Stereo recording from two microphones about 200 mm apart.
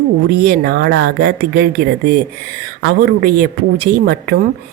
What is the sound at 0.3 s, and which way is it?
Speech, 55° right (ahead or behind).